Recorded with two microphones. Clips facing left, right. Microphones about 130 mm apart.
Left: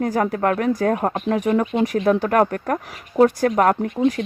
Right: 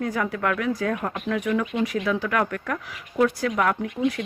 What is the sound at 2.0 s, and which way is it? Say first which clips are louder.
Speech: left 7 dB; 45° left (ahead or behind).